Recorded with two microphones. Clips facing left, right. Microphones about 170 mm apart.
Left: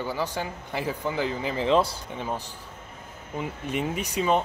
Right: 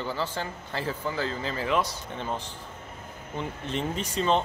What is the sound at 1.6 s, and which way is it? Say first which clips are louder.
Speech: left 5 dB; 30° left (ahead or behind).